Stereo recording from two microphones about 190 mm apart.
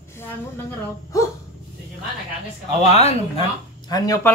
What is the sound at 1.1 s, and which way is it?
Speech, 20° left (ahead or behind).